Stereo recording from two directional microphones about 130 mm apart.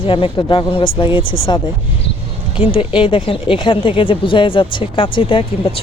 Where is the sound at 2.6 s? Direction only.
45° left (ahead or behind).